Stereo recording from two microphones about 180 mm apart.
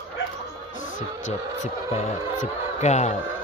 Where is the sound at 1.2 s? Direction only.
40° left (ahead or behind).